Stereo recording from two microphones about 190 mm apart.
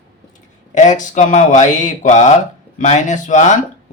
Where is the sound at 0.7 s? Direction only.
40° left (ahead or behind).